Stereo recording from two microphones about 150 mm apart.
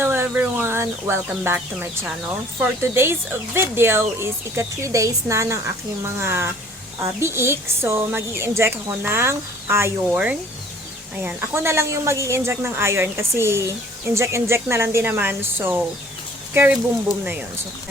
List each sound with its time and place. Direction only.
0.0 s a woman's voice: 15° right (ahead or behind)